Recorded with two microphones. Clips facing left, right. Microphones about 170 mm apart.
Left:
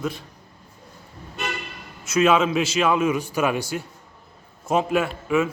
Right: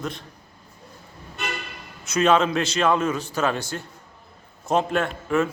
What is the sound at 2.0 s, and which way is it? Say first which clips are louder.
A man's voice: left 1 dB; centre (ahead or behind).